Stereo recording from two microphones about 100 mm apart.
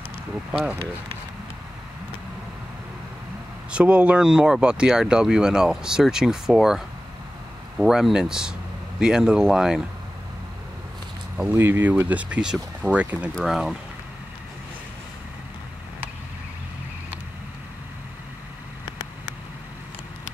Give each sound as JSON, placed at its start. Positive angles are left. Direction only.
{"t": 0.5, "sound": "speech", "side_deg": -10}
{"t": 3.7, "sound": "speech", "side_deg": -10}
{"t": 7.8, "sound": "speech", "side_deg": -5}
{"t": 11.4, "sound": "speech", "side_deg": -20}
{"t": 13.3, "sound": "speech", "side_deg": 0}